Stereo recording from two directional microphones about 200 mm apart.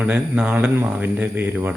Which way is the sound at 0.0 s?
5° right (ahead or behind).